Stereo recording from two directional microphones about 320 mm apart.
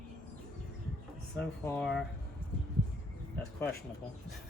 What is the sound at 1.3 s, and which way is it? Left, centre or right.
Speech, centre.